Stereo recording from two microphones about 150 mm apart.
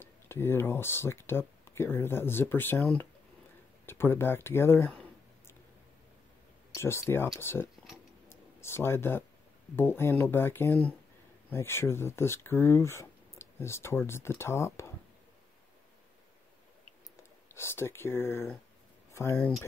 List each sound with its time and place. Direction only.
0.0 s speech: 15° left (ahead or behind)
6.7 s speech: 15° left (ahead or behind)
8.3 s a sound: 15° left (ahead or behind)
9.8 s speech: 15° left (ahead or behind)
17.6 s speech: 15° left (ahead or behind)